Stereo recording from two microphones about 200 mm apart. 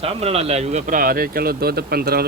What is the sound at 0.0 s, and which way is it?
Speech, 30° right (ahead or behind).